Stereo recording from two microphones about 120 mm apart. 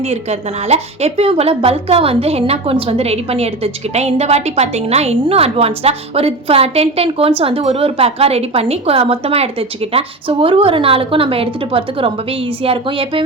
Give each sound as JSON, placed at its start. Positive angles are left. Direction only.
{"t": 0.0, "sound": "a woman's voice", "side_deg": -60}